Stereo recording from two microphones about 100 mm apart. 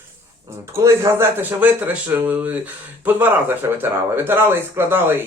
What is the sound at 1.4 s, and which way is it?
Speech, 15° right (ahead or behind).